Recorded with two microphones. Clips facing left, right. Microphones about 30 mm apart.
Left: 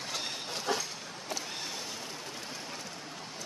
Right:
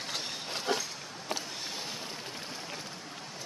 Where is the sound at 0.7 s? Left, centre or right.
Right.